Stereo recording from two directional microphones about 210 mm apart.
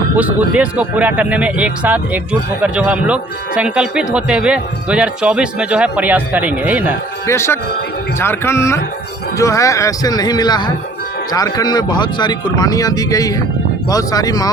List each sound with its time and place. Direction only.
0.2 s speech: 5° right (ahead or behind)
7.3 s speech: 10° left (ahead or behind)